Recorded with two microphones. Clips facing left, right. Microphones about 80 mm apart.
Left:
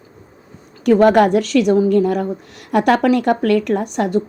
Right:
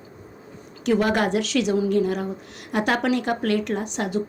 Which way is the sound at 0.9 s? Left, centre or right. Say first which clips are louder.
Left 9 dB; left.